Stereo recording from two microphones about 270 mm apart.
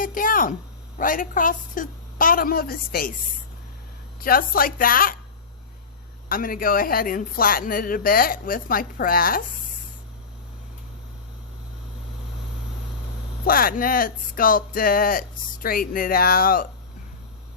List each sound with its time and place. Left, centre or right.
0.0 s speech: left
4.2 s speech: left
6.2 s speech: left
13.4 s speech: left